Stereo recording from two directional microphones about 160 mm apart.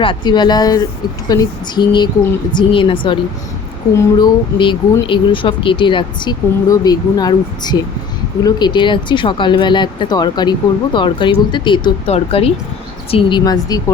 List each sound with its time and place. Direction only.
0.0 s speech: 30° left (ahead or behind)